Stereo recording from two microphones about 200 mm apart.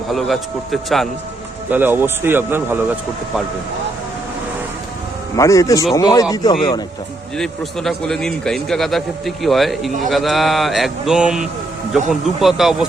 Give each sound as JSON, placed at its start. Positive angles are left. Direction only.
{"t": 0.1, "sound": "a man's voice", "side_deg": 0}
{"t": 1.7, "sound": "a man's voice", "side_deg": -10}
{"t": 5.4, "sound": "speech", "side_deg": 15}
{"t": 7.3, "sound": "a man's voice", "side_deg": 0}